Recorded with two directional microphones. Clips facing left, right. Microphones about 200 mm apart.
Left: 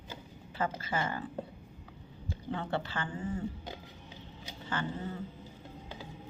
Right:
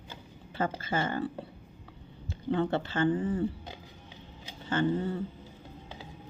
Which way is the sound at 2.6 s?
25° right (ahead or behind).